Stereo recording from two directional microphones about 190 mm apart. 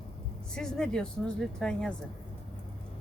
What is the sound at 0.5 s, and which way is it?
Speech, 5° left (ahead or behind).